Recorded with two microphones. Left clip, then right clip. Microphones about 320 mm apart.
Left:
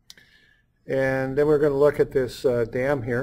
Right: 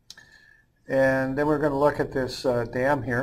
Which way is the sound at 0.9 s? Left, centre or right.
Left.